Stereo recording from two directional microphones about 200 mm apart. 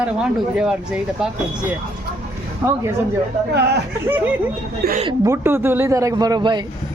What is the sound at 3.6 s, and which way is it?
Speech, 55° right (ahead or behind).